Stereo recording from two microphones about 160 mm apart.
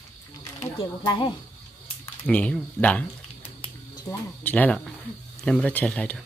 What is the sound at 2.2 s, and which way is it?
Speech, 5° left (ahead or behind).